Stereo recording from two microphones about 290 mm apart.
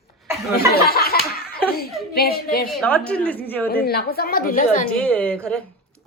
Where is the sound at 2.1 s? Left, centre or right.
Left.